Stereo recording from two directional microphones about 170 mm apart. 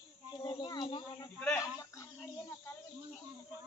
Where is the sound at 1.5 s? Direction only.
20° left (ahead or behind).